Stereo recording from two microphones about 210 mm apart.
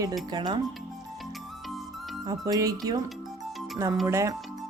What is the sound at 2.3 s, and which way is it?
Speech, 15° right (ahead or behind).